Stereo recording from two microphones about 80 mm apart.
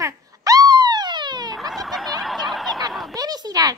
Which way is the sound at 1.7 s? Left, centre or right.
Centre.